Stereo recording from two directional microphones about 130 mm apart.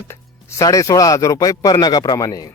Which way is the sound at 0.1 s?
25° left (ahead or behind).